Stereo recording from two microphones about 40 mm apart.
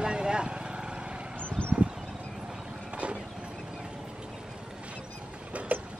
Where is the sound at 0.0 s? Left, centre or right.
Right.